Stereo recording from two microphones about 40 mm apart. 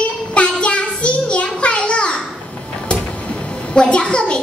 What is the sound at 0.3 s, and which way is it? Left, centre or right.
Child singing, left.